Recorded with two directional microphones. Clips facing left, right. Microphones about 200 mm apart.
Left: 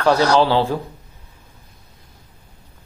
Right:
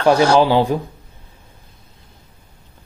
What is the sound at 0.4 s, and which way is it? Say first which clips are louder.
Speech: right 2 dB; 15° right (ahead or behind).